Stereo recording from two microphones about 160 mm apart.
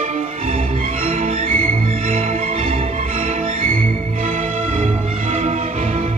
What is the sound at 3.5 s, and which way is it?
Music, 55° right (ahead or behind).